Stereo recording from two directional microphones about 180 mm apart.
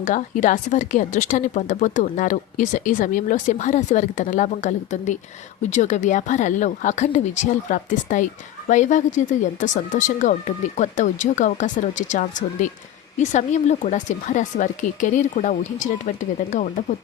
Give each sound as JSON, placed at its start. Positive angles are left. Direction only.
{"t": 0.0, "sound": "a woman's voice", "side_deg": 45}